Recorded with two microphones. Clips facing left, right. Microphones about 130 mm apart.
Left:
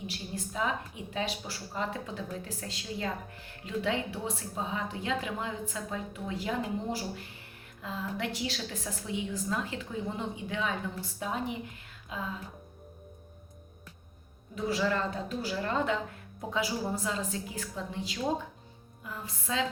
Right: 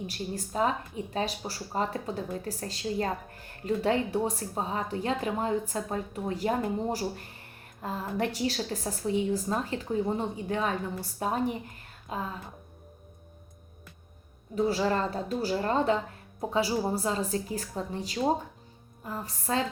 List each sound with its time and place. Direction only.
0.3 s speech: 40° right (ahead or behind)
14.5 s speech: 35° right (ahead or behind)